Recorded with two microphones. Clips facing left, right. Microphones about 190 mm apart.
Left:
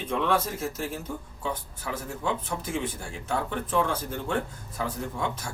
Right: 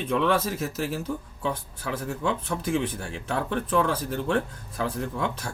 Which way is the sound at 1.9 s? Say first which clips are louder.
Right 3 dB; 65° right (ahead or behind).